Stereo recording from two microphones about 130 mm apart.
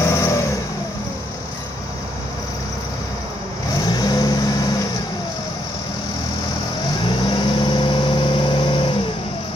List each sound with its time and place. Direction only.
0.0 s vehicle: 20° left (ahead or behind)
3.9 s vehicle: 30° left (ahead or behind)
7.2 s vehicle: 35° left (ahead or behind)